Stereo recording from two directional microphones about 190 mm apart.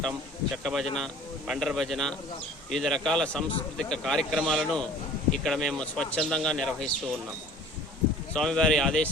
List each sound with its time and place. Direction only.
0.5 s speech: centre (ahead or behind)
8.3 s speech: 5° left (ahead or behind)